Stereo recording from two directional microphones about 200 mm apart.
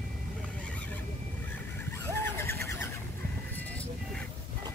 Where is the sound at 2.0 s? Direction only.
10° left (ahead or behind).